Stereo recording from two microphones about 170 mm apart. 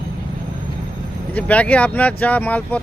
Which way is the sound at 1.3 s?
10° left (ahead or behind).